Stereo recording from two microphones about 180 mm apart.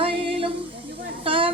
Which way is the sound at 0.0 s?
30° right (ahead or behind).